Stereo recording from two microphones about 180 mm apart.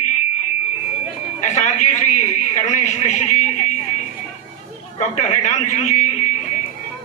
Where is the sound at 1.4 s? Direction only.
40° left (ahead or behind).